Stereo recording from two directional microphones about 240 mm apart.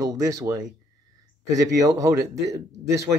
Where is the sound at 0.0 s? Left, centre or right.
Centre.